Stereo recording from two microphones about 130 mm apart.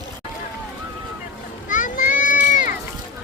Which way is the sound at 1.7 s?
80° left.